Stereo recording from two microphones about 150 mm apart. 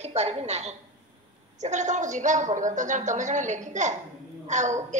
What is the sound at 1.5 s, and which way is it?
A woman's voice, 50° right (ahead or behind).